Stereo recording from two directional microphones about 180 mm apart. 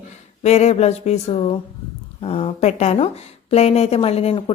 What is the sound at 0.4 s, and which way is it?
A woman's voice, 35° left (ahead or behind).